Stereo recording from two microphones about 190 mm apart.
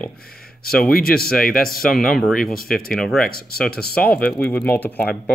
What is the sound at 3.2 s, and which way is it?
Speech, 50° left (ahead or behind).